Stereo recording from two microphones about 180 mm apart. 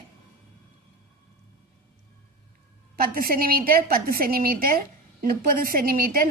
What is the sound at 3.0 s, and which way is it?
A woman's voice, 55° right (ahead or behind).